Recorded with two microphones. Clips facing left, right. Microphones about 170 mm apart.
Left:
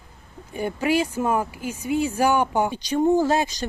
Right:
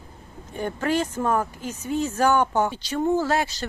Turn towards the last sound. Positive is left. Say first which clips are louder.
# left 3 dB
turn(degrees=15)  # may be behind; listen again after turning